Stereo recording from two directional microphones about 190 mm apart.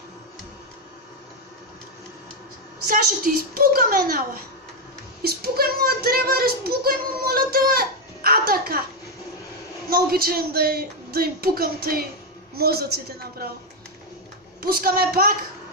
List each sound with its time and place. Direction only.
2.9 s a woman's voice: 50° right (ahead or behind)
9.8 s a woman's voice: 50° right (ahead or behind)
14.6 s a woman's voice: 50° right (ahead or behind)